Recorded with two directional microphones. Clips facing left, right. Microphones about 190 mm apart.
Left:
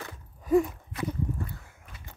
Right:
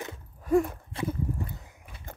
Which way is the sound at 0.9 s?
30° right (ahead or behind).